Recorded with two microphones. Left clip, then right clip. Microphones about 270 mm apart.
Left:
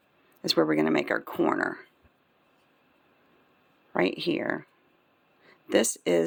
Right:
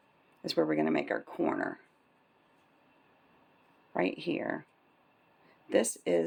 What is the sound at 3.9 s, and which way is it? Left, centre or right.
Speech, left.